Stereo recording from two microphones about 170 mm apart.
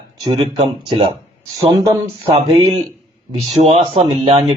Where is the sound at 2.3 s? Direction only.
35° right (ahead or behind).